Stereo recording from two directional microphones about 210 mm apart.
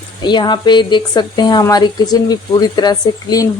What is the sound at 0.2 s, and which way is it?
A woman's voice, 20° left (ahead or behind).